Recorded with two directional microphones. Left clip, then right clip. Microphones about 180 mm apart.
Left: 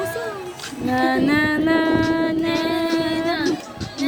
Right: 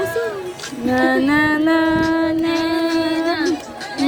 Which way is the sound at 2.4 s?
5° left (ahead or behind).